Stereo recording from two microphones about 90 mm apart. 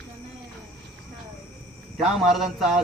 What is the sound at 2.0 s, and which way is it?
Speech, 5° right (ahead or behind).